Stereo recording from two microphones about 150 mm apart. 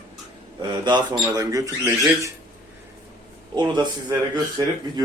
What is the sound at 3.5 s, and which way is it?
Speech, 30° right (ahead or behind).